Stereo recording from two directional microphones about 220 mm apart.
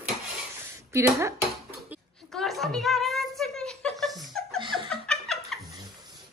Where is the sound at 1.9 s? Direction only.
Centre (ahead or behind).